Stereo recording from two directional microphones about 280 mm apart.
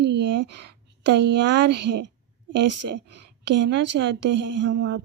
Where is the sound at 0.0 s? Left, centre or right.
Right.